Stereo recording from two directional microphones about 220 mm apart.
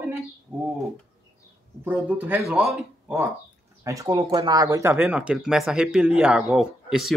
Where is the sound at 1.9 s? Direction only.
10° right (ahead or behind).